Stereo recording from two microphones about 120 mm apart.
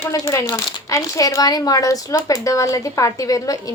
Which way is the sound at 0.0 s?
25° left (ahead or behind).